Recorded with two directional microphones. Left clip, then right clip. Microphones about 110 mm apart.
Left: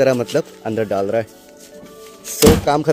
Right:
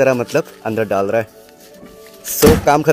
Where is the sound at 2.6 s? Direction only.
Centre (ahead or behind).